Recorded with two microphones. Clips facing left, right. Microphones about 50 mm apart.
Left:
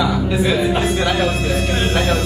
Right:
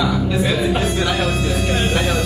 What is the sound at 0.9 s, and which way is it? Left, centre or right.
Speech, left.